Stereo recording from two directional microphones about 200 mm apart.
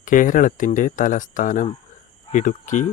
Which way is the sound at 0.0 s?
40° left (ahead or behind).